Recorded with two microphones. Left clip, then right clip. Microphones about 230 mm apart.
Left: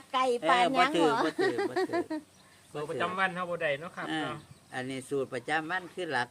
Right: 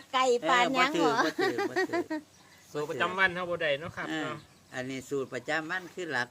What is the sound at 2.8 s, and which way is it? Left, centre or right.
A man's voice, right.